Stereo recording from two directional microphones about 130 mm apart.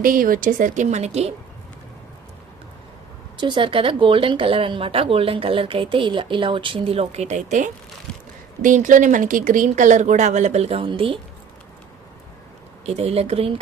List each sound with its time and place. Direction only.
0.0 s a woman's voice: 90° right; by 1.3 s 55° right (ahead or behind)
3.4 s speech: 40° right (ahead or behind); by 7.7 s 70° right (ahead or behind)
8.6 s speech: 85° right; by 11.2 s 45° right (ahead or behind)
12.8 s speech: 50° right (ahead or behind)